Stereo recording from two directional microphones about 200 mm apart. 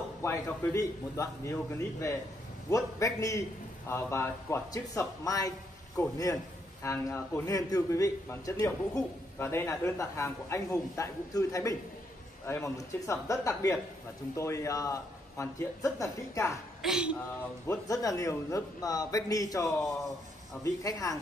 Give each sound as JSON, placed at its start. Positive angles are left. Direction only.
{"t": 0.2, "sound": "a man's voice", "side_deg": 10}
{"t": 16.8, "sound": "speech", "side_deg": -5}
{"t": 17.6, "sound": "a man's voice", "side_deg": 15}